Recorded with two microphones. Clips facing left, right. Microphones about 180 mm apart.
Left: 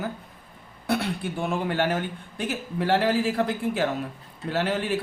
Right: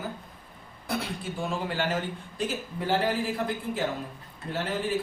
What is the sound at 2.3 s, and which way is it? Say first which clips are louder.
Speech: left 3 dB; 70° left (ahead or behind).